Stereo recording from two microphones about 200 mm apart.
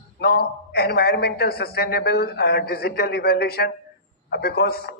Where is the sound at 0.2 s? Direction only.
50° left (ahead or behind).